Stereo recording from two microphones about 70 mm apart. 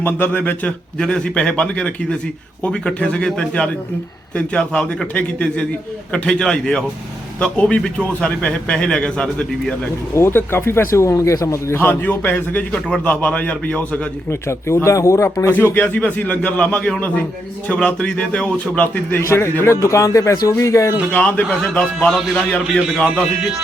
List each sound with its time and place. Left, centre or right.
0.0 s a man's voice: left
0.9 s a man's voice: centre
10.2 s speech: left
11.8 s a man's voice: left
14.3 s speech: left
15.5 s a man's voice: left
19.2 s speech: left
21.1 s a man's voice: left
21.8 s a man's voice: centre
22.1 s speech: centre